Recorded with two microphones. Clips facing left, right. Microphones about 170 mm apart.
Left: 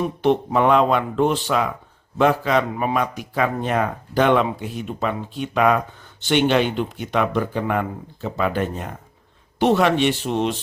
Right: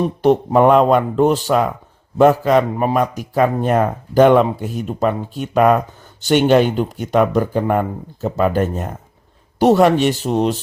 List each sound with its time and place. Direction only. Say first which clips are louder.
0.0 s a man's voice: right 4 dB; 40° right (ahead or behind)